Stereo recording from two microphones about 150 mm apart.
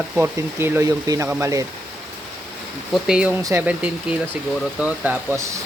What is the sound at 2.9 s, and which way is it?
Speech, 5° right (ahead or behind).